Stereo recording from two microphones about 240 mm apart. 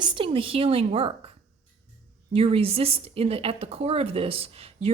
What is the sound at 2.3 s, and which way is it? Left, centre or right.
A woman's voice, right.